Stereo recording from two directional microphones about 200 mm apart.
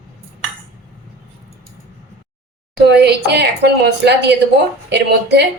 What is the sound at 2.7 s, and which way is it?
A woman's voice, 55° right (ahead or behind).